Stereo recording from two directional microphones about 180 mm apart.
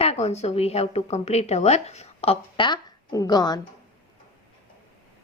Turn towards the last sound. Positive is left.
turn(degrees=20)  # may be behind; listen again after turning